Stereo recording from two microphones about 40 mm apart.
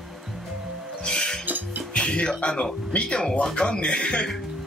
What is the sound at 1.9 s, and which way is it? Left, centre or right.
Music, left.